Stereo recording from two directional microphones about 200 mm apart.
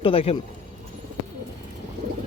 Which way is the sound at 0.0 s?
25° left (ahead or behind).